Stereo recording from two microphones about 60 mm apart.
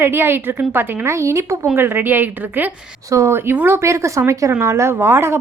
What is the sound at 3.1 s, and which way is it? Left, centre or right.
Speech, right.